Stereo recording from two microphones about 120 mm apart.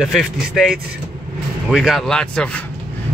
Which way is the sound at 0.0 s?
Centre (ahead or behind).